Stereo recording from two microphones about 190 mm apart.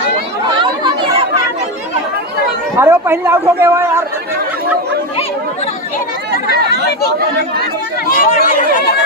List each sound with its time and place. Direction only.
2.7 s a man's voice: 10° right (ahead or behind)
6.3 s speech: 55° left (ahead or behind)